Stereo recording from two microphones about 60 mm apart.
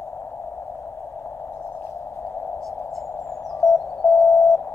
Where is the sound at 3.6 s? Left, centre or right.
Left.